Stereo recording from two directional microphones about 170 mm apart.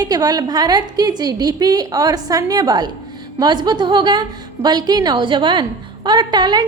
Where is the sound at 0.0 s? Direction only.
20° right (ahead or behind).